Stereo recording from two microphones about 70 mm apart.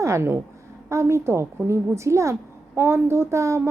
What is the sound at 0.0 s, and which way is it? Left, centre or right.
A woman's voice, right.